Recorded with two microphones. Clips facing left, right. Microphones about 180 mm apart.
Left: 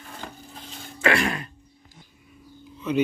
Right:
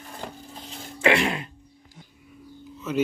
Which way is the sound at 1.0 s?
20° right (ahead or behind).